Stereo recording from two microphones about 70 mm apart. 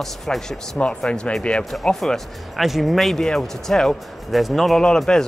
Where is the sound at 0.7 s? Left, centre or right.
Centre.